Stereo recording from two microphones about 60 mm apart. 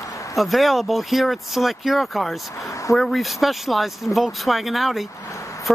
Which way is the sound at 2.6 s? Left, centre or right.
Left.